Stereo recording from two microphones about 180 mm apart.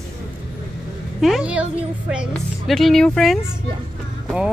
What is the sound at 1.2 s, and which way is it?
Speech, 5° right (ahead or behind).